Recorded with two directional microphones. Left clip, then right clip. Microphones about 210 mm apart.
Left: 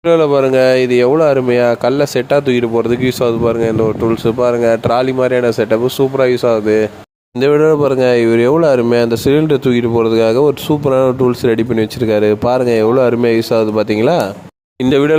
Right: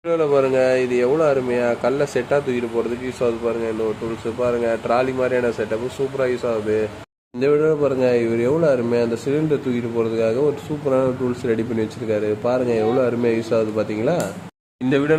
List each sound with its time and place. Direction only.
0.0 s speech: 40° left (ahead or behind)